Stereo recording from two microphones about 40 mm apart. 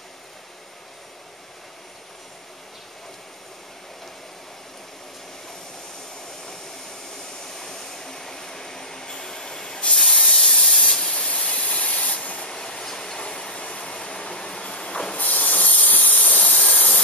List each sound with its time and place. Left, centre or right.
7.4 s train: centre
9.9 s spray: centre
11.1 s spray: left
12.4 s train: centre
15.1 s hiss: left
16.7 s jet engine: left